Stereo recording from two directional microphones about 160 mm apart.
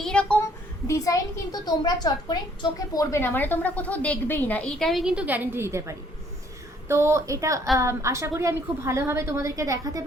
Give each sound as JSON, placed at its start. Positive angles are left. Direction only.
{"t": 0.0, "sound": "a woman's voice", "side_deg": 5}
{"t": 0.9, "sound": "a woman's voice", "side_deg": 20}